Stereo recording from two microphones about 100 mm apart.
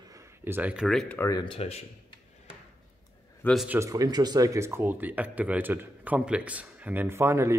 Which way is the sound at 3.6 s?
25° right (ahead or behind).